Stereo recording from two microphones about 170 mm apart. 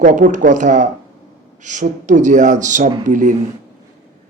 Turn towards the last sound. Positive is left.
turn(degrees=-50)  # may be behind; listen again after turning